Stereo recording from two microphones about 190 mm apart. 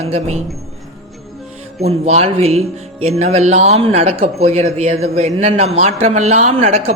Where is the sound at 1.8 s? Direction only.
35° right (ahead or behind).